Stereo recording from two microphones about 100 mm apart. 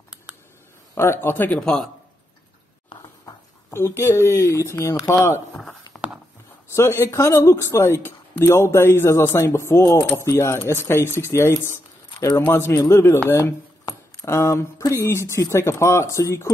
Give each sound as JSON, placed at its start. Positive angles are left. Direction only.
{"t": 0.9, "sound": "speech", "side_deg": 25}
{"t": 1.6, "sound": "a man's voice", "side_deg": 5}
{"t": 3.7, "sound": "speech", "side_deg": 25}
{"t": 6.7, "sound": "speech", "side_deg": 25}